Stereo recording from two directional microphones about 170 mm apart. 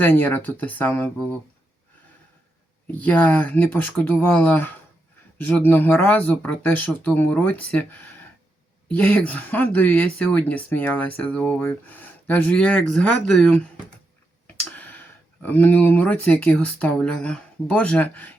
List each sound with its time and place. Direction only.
0.0 s speech: 10° left (ahead or behind)
2.8 s speech: 10° left (ahead or behind)